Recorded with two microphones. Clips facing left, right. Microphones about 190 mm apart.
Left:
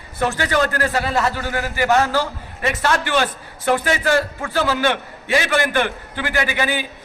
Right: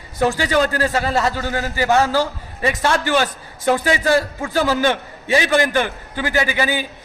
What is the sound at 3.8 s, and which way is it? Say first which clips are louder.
A man's voice: right 2 dB; 15° right (ahead or behind).